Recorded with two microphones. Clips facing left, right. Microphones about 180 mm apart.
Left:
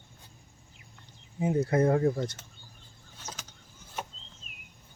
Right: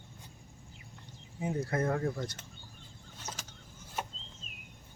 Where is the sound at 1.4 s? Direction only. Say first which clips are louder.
Left 7 dB; 20° left (ahead or behind).